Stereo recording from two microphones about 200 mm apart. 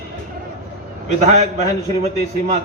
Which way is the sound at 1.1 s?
35° right (ahead or behind).